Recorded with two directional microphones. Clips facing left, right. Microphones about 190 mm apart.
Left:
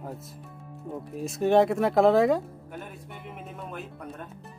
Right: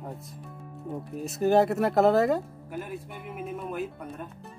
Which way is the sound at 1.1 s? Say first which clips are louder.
Left 1 dB; centre (ahead or behind).